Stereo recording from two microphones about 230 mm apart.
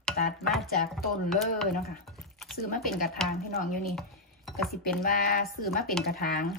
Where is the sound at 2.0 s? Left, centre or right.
Centre.